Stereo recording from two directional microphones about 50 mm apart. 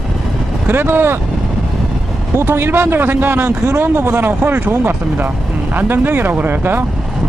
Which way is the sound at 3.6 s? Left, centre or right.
Right.